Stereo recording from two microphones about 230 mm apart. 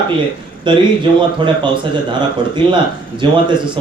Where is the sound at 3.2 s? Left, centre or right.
Centre.